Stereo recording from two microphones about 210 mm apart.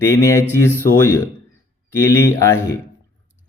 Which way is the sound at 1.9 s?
15° left (ahead or behind).